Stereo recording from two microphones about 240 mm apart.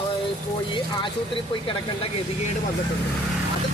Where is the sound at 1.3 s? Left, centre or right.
Left.